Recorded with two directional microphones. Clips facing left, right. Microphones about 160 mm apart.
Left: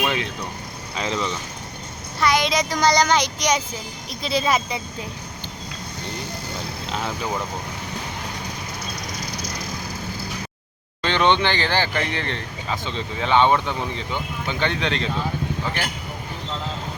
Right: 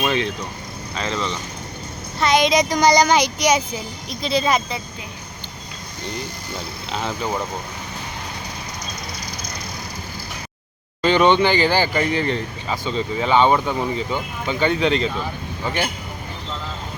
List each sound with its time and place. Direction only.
0.0 s vehicle: centre (ahead or behind)
0.9 s speech: 15° left (ahead or behind)
2.2 s speech: 20° right (ahead or behind)
4.1 s speech: 5° left (ahead or behind)
11.0 s speech: 5° right (ahead or behind)